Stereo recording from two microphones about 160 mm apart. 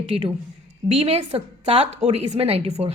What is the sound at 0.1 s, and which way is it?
A woman's voice, 35° right (ahead or behind).